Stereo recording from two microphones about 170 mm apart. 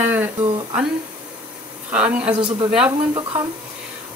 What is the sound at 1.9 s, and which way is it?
Speech, 5° right (ahead or behind).